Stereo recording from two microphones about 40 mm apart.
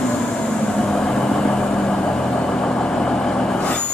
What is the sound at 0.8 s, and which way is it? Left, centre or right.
Vehicle, centre.